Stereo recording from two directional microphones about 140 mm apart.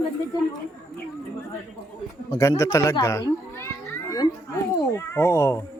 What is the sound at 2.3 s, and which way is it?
A child's voice, 25° left (ahead or behind).